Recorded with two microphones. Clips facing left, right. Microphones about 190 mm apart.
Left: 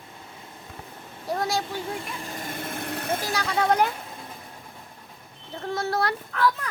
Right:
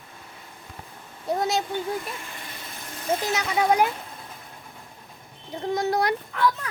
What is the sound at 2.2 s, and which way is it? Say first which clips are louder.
Vehicle: left 7 dB; 50° left (ahead or behind).